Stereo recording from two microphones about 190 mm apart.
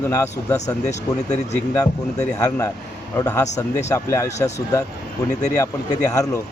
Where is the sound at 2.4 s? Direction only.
20° left (ahead or behind).